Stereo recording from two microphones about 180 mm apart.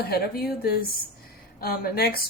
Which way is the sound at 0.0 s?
60° left (ahead or behind).